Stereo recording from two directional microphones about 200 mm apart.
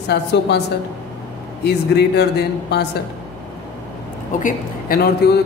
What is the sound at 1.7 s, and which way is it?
A man's voice, 55° left (ahead or behind).